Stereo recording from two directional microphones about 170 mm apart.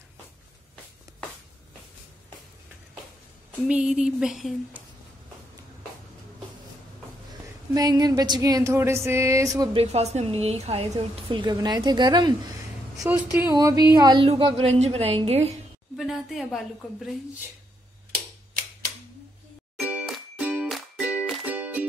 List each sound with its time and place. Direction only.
3.6 s speech: 5° right (ahead or behind)
7.7 s a sound: 20° right (ahead or behind)
9.8 s a woman's voice: 40° right (ahead or behind)
13.2 s speech: 10° right (ahead or behind)
13.5 s a woman's voice: 20° right (ahead or behind); by 15.5 s 40° right (ahead or behind)
16.0 s a woman's voice: centre (ahead or behind)
19.8 s music: 5° right (ahead or behind)